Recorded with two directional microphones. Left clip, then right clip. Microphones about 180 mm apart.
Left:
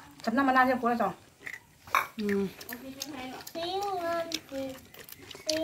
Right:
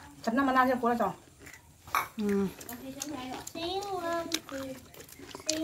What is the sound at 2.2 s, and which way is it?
Speech, 10° right (ahead or behind).